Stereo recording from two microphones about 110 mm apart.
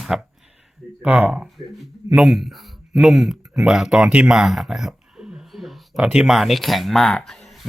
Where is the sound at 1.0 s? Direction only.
15° right (ahead or behind).